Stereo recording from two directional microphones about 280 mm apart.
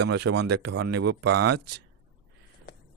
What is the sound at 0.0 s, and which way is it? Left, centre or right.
Speech, right.